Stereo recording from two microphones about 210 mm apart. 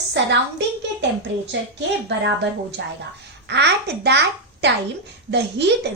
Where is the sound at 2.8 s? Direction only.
55° right (ahead or behind).